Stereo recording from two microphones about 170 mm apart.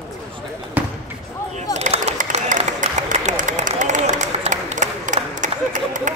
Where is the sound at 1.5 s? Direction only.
45° right (ahead or behind).